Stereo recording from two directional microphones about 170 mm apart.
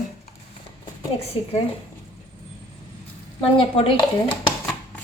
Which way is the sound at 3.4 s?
30° left (ahead or behind).